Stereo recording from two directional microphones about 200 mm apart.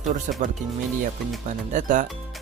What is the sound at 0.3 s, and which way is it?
Speech, 40° right (ahead or behind).